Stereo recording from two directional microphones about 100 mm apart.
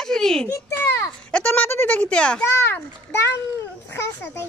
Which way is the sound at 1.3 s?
15° left (ahead or behind).